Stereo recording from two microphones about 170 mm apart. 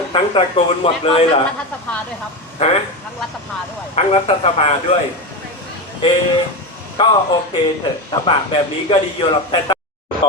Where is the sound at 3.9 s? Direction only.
40° left (ahead or behind).